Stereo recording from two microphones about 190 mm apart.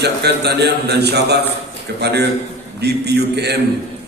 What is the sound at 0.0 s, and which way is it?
A man's voice, 60° right (ahead or behind).